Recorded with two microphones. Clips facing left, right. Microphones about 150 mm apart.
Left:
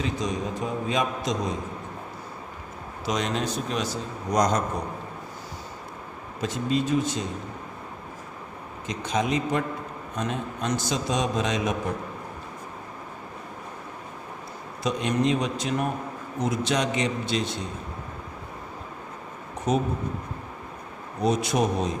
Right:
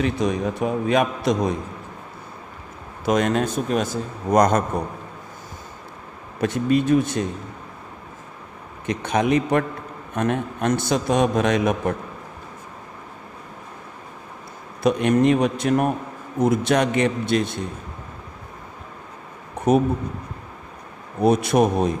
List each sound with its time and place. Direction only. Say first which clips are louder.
0.0 s a man's voice: right 6 dB; 65° right (ahead or behind)
3.1 s speech: right 7 dB; 55° right (ahead or behind)
6.4 s a man's voice: right 6 dB; 60° right (ahead or behind)
8.9 s a man's voice: right 6 dB; 60° right (ahead or behind)
14.8 s a man's voice: right 7 dB; 60° right (ahead or behind)
21.2 s a man's voice: right 6 dB; 55° right (ahead or behind)